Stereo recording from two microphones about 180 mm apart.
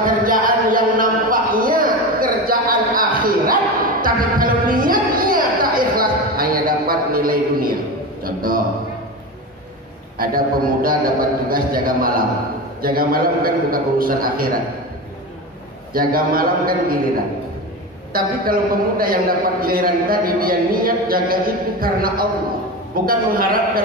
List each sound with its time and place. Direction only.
0.0 s a sound: 50° right (ahead or behind)
10.1 s a man's voice: 55° right (ahead or behind)
15.9 s a man's voice: 55° right (ahead or behind)
18.1 s a man's voice: 55° right (ahead or behind)